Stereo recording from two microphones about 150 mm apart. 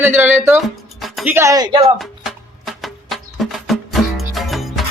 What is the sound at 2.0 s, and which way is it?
Music, centre (ahead or behind).